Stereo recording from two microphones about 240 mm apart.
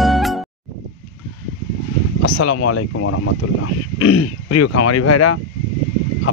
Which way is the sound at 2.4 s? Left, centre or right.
Left.